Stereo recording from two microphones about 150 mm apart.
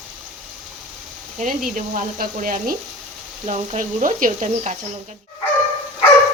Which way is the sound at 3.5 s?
50° right (ahead or behind).